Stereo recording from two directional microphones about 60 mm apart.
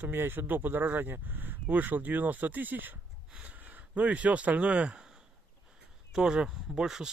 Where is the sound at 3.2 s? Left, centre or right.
Right.